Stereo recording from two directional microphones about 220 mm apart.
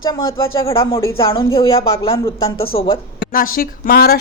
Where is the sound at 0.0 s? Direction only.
15° left (ahead or behind).